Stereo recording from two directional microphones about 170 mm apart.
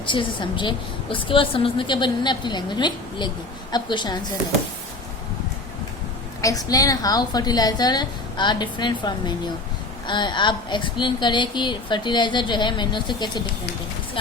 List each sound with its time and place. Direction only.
0.0 s speech: 30° left (ahead or behind)
6.4 s speech: 20° left (ahead or behind)